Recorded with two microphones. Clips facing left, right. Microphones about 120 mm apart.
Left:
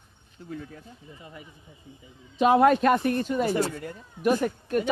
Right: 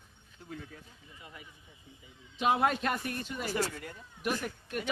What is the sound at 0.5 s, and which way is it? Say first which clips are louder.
Speech: left 7 dB; 40° left (ahead or behind).